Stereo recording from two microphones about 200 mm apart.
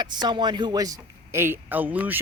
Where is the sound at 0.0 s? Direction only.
20° right (ahead or behind).